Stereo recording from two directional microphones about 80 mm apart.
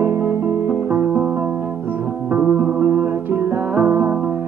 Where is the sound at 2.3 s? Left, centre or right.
Centre.